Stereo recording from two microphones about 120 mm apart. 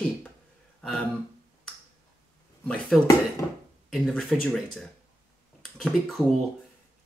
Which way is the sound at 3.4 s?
25° left (ahead or behind).